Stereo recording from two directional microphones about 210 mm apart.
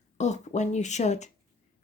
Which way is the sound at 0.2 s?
35° left (ahead or behind).